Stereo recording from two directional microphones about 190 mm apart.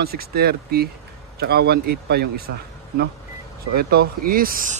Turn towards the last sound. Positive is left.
turn(degrees=-50)  # may be behind; listen again after turning